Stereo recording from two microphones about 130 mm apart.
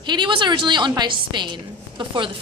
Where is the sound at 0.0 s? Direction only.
35° right (ahead or behind).